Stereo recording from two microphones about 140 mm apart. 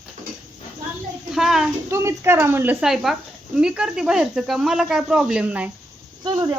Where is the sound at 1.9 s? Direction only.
20° right (ahead or behind).